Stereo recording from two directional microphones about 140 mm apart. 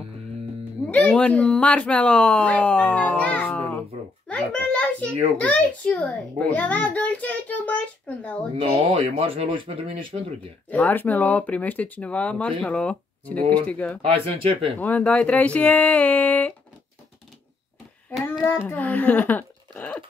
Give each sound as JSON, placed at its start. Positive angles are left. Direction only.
{"t": 0.8, "sound": "speech", "side_deg": 10}
{"t": 4.3, "sound": "a sound", "side_deg": 10}
{"t": 5.4, "sound": "speech", "side_deg": 10}
{"t": 9.0, "sound": "speech", "side_deg": -45}
{"t": 10.7, "sound": "speech", "side_deg": 10}
{"t": 14.0, "sound": "speech", "side_deg": -45}
{"t": 14.8, "sound": "speech", "side_deg": 10}
{"t": 18.4, "sound": "a child's voice", "side_deg": 15}